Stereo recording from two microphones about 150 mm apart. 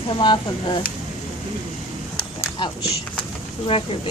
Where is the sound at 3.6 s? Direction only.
40° left (ahead or behind).